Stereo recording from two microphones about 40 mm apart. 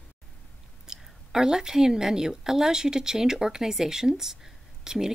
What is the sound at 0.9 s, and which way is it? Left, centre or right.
A woman's voice, centre.